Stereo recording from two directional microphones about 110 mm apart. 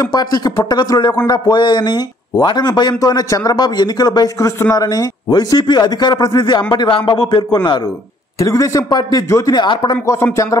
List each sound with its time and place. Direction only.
0.0 s speech: 35° left (ahead or behind)
8.4 s speech: 30° left (ahead or behind)
10.1 s speech: 30° left (ahead or behind)